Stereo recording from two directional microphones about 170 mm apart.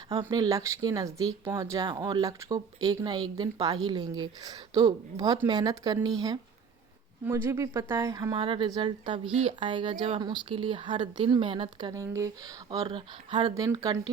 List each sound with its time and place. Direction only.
0.1 s speech: 20° right (ahead or behind)